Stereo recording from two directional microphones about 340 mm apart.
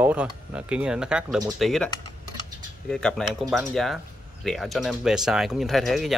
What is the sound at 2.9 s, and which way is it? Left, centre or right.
Speech, centre.